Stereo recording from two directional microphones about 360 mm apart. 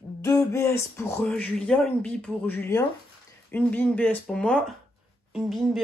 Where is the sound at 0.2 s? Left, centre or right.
Centre.